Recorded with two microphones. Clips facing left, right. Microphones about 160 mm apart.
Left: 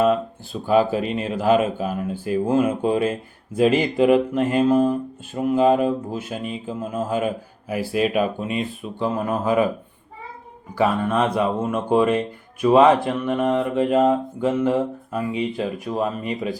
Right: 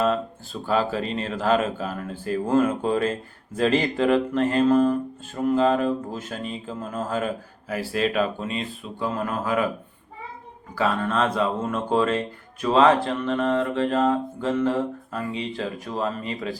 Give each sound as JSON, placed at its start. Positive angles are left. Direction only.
{"t": 0.7, "sound": "speech", "side_deg": 15}
{"t": 10.8, "sound": "speech", "side_deg": 15}